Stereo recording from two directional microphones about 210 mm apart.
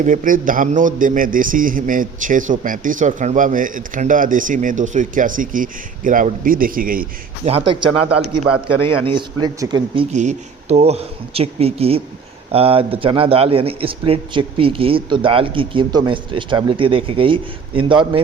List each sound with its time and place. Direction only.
0.0 s a man's voice: 40° right (ahead or behind)
7.4 s speech: 25° right (ahead or behind)
8.2 s a man's voice: centre (ahead or behind)
9.0 s speech: 20° right (ahead or behind)